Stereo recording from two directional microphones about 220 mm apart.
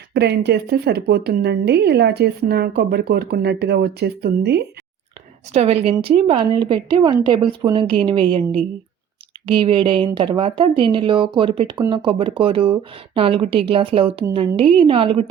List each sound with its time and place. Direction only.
0.1 s speech: 50° right (ahead or behind)
5.5 s speech: 30° right (ahead or behind)